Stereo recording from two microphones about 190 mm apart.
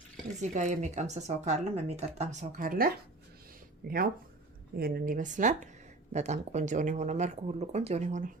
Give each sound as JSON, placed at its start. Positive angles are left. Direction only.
{"t": 0.4, "sound": "speech", "side_deg": -40}